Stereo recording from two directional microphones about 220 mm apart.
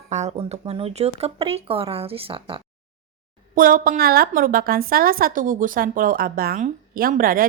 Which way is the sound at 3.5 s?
40° right (ahead or behind).